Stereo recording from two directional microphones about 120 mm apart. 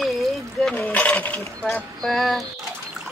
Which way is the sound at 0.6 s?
5° left (ahead or behind).